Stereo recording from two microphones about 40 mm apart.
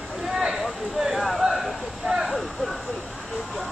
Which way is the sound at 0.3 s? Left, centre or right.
Right.